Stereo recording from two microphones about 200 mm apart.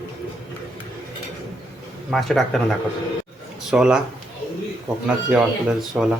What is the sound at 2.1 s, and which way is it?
A man's voice, centre (ahead or behind).